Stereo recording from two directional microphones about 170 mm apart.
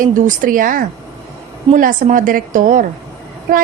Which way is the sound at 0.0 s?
50° right (ahead or behind).